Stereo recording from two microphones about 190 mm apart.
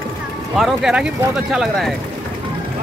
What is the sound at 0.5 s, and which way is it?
Speech, centre (ahead or behind).